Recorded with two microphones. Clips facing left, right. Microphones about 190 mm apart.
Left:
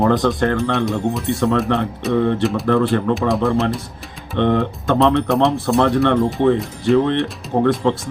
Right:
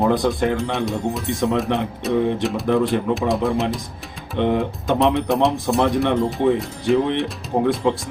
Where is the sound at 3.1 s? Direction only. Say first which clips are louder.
Left 2 dB; centre (ahead or behind).